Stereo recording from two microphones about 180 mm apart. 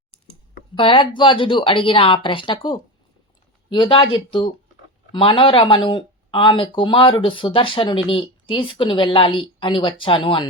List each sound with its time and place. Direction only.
0.8 s speech: 30° left (ahead or behind)